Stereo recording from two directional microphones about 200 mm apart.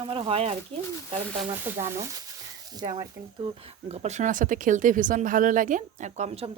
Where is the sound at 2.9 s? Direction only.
25° right (ahead or behind).